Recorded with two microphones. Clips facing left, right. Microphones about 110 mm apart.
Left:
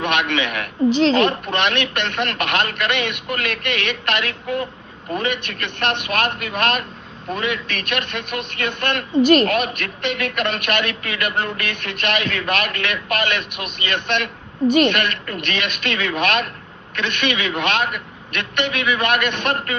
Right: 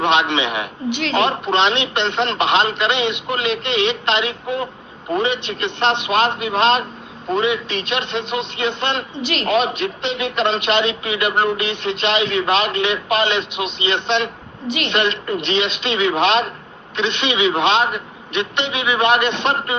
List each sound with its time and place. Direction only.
0.0 s a man's voice: 20° right (ahead or behind)
0.9 s a woman's voice: 35° left (ahead or behind)
1.1 s a man's voice: 20° right (ahead or behind)
9.1 s a man's voice: 45° left (ahead or behind)
9.5 s a man's voice: 20° right (ahead or behind)